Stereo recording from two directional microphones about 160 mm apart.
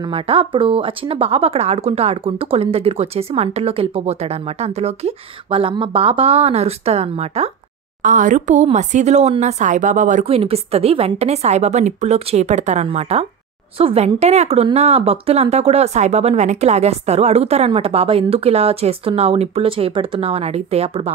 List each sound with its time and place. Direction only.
0.0 s speech: 35° right (ahead or behind)
8.0 s speech: 55° right (ahead or behind)
10.2 s speech: 40° right (ahead or behind)